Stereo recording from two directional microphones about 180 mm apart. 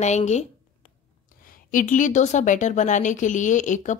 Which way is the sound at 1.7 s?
45° left (ahead or behind).